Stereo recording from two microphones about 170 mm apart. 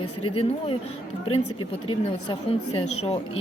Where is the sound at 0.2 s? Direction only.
35° left (ahead or behind).